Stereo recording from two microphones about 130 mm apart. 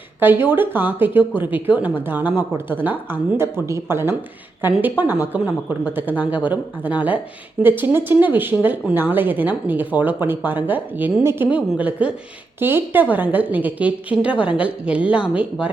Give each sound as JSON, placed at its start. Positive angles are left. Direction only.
{"t": 0.2, "sound": "speech", "side_deg": -15}